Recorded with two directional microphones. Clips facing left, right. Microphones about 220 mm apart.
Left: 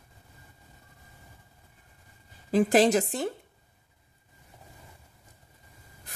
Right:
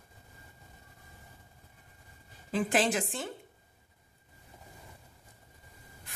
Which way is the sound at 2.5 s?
40° left (ahead or behind).